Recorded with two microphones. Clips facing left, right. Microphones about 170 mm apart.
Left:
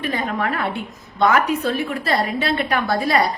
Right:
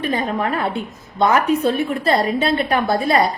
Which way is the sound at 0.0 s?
30° right (ahead or behind).